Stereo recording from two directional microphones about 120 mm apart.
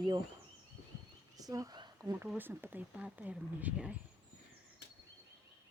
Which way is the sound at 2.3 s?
15° right (ahead or behind).